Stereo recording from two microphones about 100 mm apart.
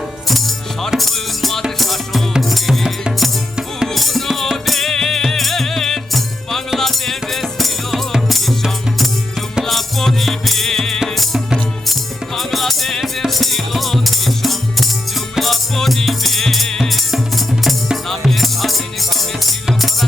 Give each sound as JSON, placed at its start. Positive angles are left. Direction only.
{"t": 0.3, "sound": "music", "side_deg": 0}